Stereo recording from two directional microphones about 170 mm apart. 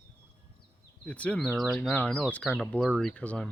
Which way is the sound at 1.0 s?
5° left (ahead or behind).